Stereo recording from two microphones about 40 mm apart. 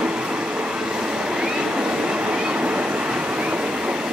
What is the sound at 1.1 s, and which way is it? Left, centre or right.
Train, centre.